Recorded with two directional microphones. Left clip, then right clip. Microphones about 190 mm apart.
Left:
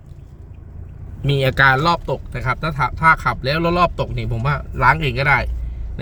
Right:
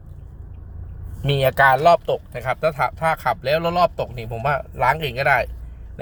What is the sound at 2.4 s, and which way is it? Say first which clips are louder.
Speech: left 1 dB; 5° right (ahead or behind).